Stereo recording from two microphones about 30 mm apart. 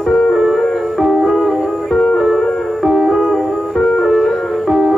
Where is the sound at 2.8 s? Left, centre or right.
Centre.